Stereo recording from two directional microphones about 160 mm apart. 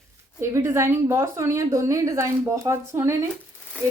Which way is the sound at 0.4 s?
15° right (ahead or behind).